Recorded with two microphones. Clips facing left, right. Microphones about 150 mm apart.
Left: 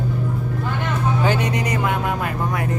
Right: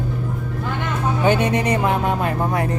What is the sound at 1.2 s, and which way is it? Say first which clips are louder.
Speech: right 7 dB; 25° right (ahead or behind).